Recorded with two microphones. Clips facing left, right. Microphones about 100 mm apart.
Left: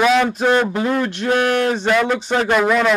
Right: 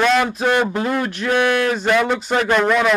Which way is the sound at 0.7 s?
Centre (ahead or behind).